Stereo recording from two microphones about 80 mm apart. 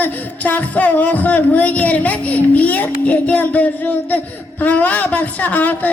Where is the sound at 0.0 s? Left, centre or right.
Centre.